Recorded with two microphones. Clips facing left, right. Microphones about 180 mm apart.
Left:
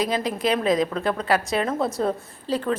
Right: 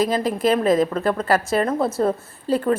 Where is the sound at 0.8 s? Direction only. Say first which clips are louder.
Right 3 dB; 5° right (ahead or behind).